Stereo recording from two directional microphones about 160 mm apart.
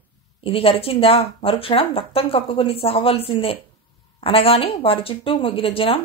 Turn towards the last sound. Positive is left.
turn(degrees=35)  # may be behind; listen again after turning